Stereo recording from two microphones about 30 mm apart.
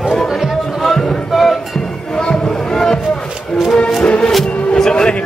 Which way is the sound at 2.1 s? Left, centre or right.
Left.